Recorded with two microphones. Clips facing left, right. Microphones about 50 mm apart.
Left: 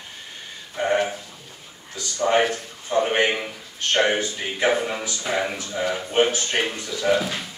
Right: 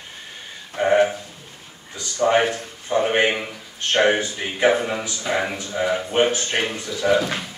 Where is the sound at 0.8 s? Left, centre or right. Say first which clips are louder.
Right 5 dB; centre.